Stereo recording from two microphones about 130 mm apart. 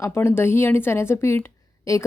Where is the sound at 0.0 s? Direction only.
20° left (ahead or behind).